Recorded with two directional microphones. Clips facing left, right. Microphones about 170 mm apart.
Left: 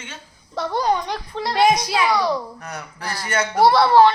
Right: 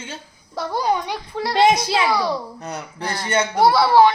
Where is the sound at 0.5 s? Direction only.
5° right (ahead or behind).